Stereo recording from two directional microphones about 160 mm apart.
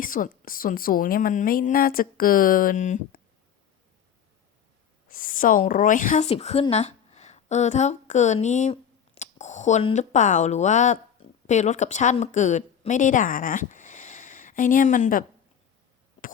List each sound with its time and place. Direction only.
0.0 s a woman's voice: 60° left (ahead or behind)
5.0 s a woman's voice: 60° left (ahead or behind)